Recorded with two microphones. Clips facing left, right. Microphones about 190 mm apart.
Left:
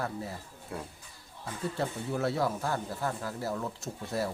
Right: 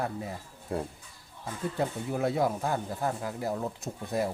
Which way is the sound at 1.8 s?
15° right (ahead or behind).